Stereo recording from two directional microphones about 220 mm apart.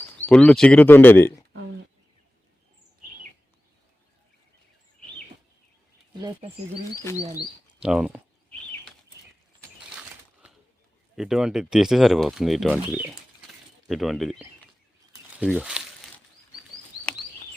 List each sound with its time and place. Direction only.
0.3 s speech: 5° left (ahead or behind)
6.1 s speech: 20° right (ahead or behind)
7.8 s speech: 5° right (ahead or behind)
11.2 s speech: centre (ahead or behind)